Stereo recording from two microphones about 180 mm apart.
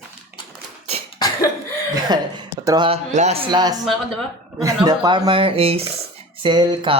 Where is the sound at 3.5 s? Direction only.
25° right (ahead or behind).